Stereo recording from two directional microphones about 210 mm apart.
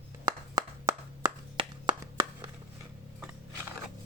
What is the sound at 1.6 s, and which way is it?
Clapping, 25° right (ahead or behind).